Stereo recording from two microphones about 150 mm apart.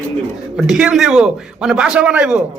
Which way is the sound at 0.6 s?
5° right (ahead or behind).